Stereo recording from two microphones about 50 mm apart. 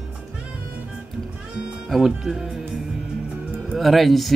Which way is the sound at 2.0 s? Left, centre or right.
Centre.